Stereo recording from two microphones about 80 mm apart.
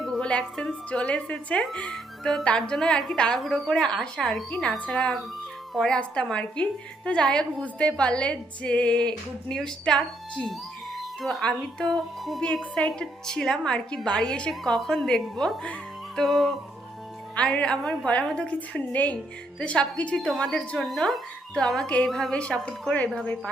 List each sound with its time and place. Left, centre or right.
0.0 s speech: centre
17.3 s speech: centre
20.1 s speech: centre